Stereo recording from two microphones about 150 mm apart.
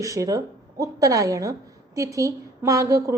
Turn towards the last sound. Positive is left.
turn(degrees=-20)  # may be behind; listen again after turning